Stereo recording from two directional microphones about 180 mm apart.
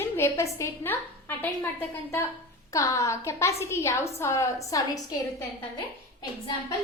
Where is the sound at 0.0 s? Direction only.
15° left (ahead or behind).